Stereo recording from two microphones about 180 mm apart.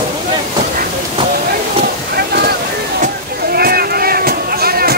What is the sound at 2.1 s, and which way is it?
Boat, 60° right (ahead or behind).